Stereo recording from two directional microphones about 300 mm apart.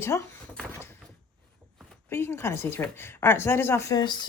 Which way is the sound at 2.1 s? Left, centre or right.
Centre.